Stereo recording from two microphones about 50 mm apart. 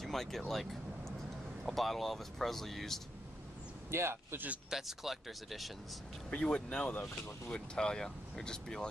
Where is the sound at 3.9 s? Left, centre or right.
Right.